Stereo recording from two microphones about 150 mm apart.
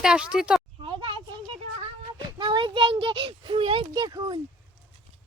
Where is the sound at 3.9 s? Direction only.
25° right (ahead or behind).